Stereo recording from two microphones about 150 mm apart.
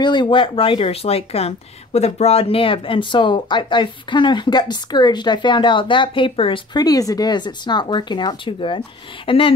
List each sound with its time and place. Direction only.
0.0 s speech: 30° left (ahead or behind)